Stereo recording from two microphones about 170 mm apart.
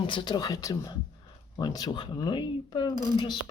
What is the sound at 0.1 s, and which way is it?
Speech, 25° left (ahead or behind).